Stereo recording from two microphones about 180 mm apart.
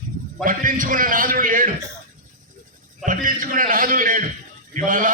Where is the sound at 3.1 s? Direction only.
45° right (ahead or behind).